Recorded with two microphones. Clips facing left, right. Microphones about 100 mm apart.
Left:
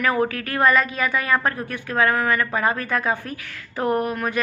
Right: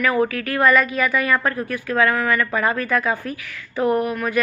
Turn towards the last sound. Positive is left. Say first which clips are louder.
# right 2 dB
turn(degrees=35)  # may be behind; listen again after turning